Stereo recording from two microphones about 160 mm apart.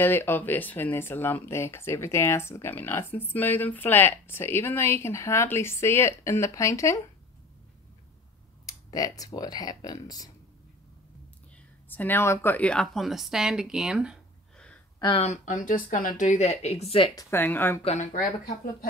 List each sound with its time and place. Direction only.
0.0 s speech: 15° left (ahead or behind)
8.6 s speech: 25° left (ahead or behind)
11.9 s speech: 10° left (ahead or behind)
15.0 s speech: 30° left (ahead or behind)
15.2 s speech: 55° left (ahead or behind)
17.1 s speech: 20° left (ahead or behind)
17.8 s speech: 50° left (ahead or behind)